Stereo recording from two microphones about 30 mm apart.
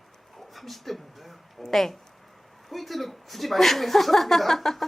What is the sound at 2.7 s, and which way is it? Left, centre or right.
A woman's voice, centre.